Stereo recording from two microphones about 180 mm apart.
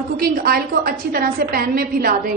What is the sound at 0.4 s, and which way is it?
A woman's voice, 55° right (ahead or behind).